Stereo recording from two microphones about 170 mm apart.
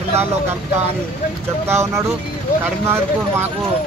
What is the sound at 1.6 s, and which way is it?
Speech, 15° right (ahead or behind).